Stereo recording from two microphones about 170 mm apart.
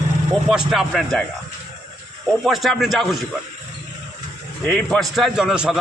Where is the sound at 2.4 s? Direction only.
Centre (ahead or behind).